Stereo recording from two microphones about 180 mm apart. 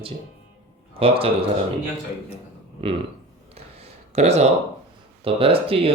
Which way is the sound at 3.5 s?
35° right (ahead or behind).